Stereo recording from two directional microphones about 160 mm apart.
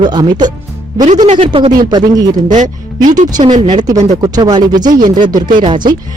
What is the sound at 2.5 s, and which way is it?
Speech, 50° right (ahead or behind).